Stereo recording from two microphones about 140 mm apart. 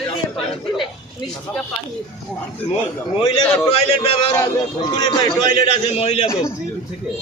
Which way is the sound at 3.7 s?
40° left (ahead or behind).